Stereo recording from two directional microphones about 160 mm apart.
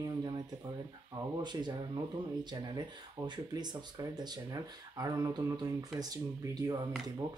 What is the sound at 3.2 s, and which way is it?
Speech, 25° right (ahead or behind).